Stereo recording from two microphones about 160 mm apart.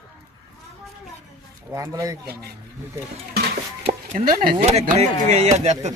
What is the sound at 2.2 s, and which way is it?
Speech, 80° right.